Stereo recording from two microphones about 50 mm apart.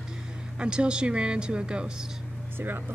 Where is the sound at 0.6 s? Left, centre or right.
Centre.